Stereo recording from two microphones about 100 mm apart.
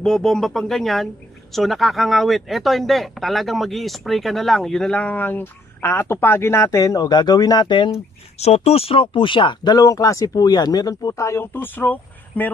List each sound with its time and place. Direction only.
0.0 s speech: 5° left (ahead or behind); by 7.9 s 50° left (ahead or behind)
8.4 s speech: 90° left; by 12.4 s 20° left (ahead or behind)